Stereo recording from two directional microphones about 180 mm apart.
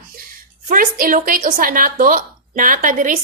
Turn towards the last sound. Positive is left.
turn(degrees=-45)  # may be behind; listen again after turning